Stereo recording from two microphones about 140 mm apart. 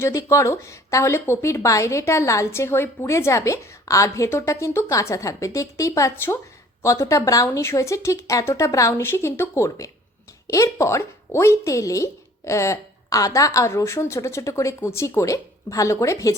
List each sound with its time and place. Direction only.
0.0 s speech: 20° left (ahead or behind)